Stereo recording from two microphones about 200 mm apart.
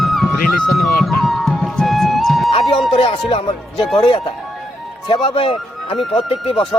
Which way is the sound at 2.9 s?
25° left (ahead or behind).